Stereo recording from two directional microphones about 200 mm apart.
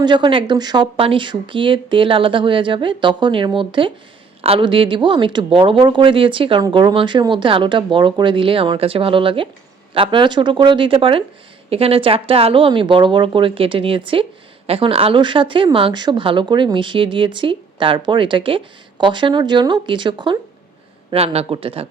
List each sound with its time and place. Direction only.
0.0 s speech: 25° right (ahead or behind)